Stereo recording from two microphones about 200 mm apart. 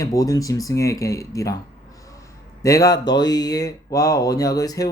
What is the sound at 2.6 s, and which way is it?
Speech, 15° left (ahead or behind).